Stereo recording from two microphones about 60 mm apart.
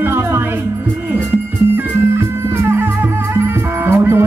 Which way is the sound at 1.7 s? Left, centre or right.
Right.